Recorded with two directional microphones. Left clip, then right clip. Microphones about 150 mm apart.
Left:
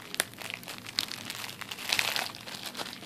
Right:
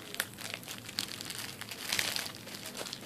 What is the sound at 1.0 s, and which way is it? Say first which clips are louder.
Crumpling: left 5 dB; 25° left (ahead or behind).